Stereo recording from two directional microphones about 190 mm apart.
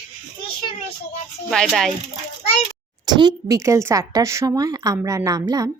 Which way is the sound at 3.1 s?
20° right (ahead or behind).